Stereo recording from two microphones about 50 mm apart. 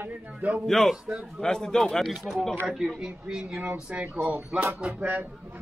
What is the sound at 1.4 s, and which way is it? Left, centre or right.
Speech, centre.